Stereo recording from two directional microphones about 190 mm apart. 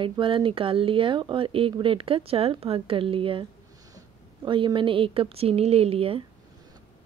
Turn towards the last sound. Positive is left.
turn(degrees=-30)  # may be behind; listen again after turning